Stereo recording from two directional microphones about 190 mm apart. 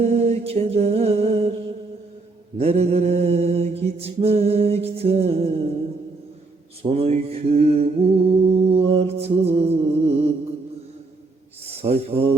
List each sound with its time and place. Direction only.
0.0 s music: 35° right (ahead or behind)
2.6 s mantra: 35° right (ahead or behind)
6.8 s mantra: 30° right (ahead or behind)
11.7 s speech: 30° right (ahead or behind)